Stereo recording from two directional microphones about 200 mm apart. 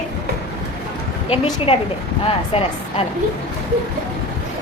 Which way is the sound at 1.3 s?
30° left (ahead or behind).